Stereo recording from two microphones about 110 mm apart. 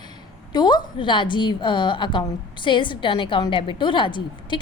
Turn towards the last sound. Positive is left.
turn(degrees=45)  # may be behind; listen again after turning